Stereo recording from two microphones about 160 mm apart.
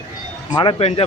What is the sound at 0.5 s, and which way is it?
Speech, 30° left (ahead or behind).